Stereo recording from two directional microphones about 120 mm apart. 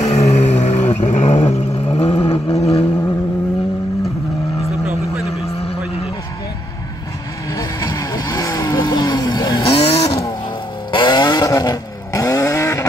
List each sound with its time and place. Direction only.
0.0 s vehicle: 70° left (ahead or behind)
5.4 s vehicle: 55° left (ahead or behind)
7.5 s vehicle: 25° left (ahead or behind)
9.7 s vehicle: 50° left (ahead or behind)
10.9 s vehicle: 40° left (ahead or behind); by 12.8 s 25° left (ahead or behind)